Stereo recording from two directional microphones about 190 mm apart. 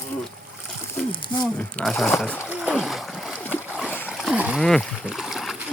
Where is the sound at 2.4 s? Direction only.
5° right (ahead or behind).